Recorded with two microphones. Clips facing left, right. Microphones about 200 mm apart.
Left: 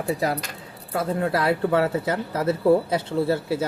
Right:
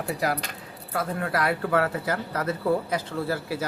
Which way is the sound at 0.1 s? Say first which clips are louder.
Left 3 dB; 25° left (ahead or behind).